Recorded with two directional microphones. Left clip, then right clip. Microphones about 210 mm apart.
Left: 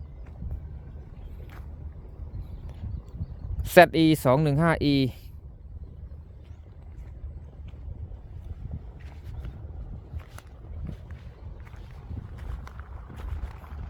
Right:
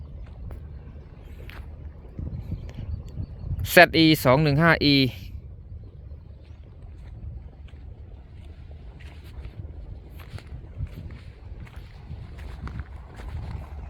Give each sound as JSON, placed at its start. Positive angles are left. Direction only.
{"t": 3.6, "sound": "speech", "side_deg": 0}
{"t": 12.7, "sound": "horse", "side_deg": 25}
{"t": 13.6, "sound": "vehicle", "side_deg": -45}